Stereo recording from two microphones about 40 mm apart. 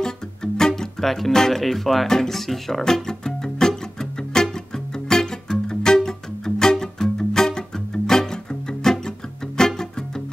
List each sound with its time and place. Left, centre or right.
0.0 s music: centre
1.0 s speech: centre
2.8 s music: centre